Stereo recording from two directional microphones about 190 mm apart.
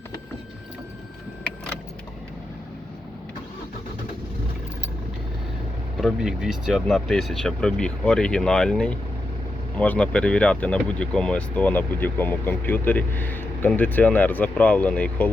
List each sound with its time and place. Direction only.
6.0 s speech: centre (ahead or behind)